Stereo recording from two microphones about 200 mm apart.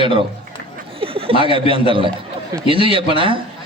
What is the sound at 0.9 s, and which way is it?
A man's voice, 30° right (ahead or behind).